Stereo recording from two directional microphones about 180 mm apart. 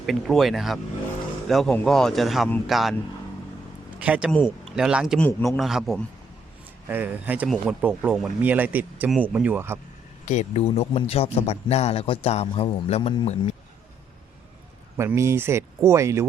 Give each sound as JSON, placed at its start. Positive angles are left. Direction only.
{"t": 0.0, "sound": "speech", "side_deg": 0}
{"t": 4.0, "sound": "speech", "side_deg": -10}
{"t": 10.2, "sound": "a man's voice", "side_deg": 40}
{"t": 14.9, "sound": "speech", "side_deg": -15}